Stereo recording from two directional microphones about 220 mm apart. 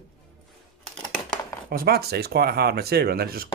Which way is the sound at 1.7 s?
45° right (ahead or behind).